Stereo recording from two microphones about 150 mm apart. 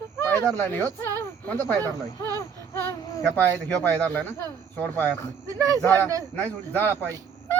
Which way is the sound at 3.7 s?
10° left (ahead or behind).